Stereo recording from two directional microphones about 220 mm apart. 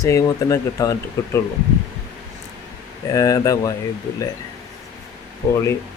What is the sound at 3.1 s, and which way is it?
Speech, 15° left (ahead or behind).